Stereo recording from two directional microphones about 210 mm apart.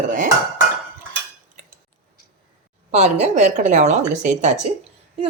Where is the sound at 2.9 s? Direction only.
30° right (ahead or behind).